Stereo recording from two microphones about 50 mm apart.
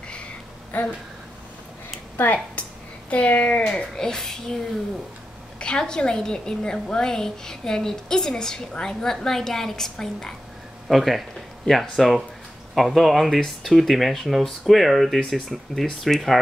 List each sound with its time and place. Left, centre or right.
0.7 s speech: left
2.1 s a woman's voice: left; by 4.4 s centre
5.6 s a woman's voice: centre